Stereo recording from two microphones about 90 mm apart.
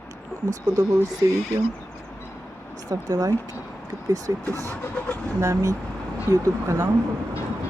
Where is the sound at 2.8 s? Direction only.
45° right (ahead or behind).